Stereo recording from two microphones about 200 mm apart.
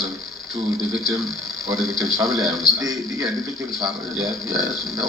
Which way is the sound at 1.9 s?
15° right (ahead or behind).